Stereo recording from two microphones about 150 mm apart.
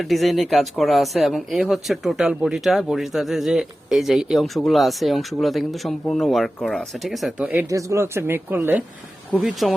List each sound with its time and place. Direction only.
0.0 s speech: centre (ahead or behind)
7.7 s speech: 20° right (ahead or behind)
9.3 s speech: centre (ahead or behind)